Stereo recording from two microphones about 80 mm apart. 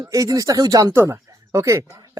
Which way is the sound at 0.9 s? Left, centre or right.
Right.